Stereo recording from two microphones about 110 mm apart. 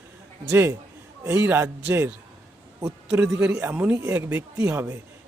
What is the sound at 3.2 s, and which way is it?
A man's voice, 10° right (ahead or behind).